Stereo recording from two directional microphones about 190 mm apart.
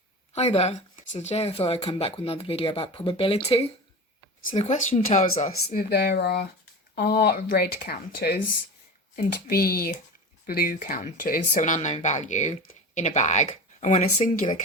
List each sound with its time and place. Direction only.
0.3 s speech: 35° left (ahead or behind)
5.9 s speech: 55° left (ahead or behind); by 14.0 s 40° left (ahead or behind)